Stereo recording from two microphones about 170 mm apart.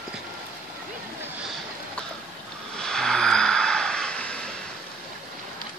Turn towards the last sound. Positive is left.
turn(degrees=5)  # may be behind; listen again after turning